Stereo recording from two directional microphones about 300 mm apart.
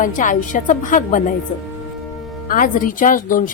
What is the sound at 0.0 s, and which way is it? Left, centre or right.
A woman's voice, left.